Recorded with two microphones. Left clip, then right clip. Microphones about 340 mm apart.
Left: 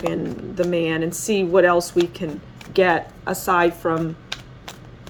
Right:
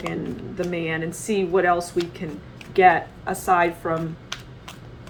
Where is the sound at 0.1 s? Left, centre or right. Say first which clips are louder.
Left 4 dB; left.